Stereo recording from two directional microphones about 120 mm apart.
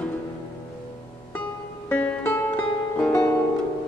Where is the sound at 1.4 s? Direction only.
15° left (ahead or behind).